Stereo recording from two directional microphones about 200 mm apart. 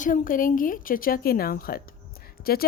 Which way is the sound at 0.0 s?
40° left (ahead or behind).